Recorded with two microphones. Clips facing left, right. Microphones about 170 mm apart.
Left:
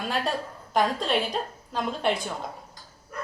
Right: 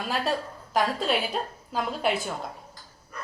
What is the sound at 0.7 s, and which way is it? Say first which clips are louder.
A woman's voice: left 1 dB; 5° right (ahead or behind).